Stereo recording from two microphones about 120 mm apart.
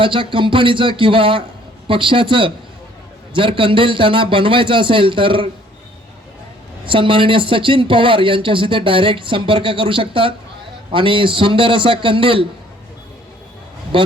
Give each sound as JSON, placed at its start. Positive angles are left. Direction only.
{"t": 0.0, "sound": "a man's voice", "side_deg": -45}
{"t": 6.8, "sound": "a man's voice", "side_deg": -45}
{"t": 13.9, "sound": "speech", "side_deg": -45}